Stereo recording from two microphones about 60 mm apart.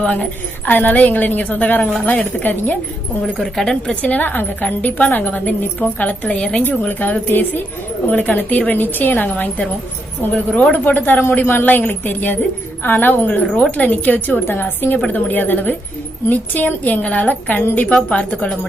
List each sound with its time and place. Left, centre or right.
0.0 s a woman's voice: centre
3.3 s a woman's voice: centre
4.0 s a woman's voice: left
6.6 s a woman's voice: left
17.9 s a woman's voice: centre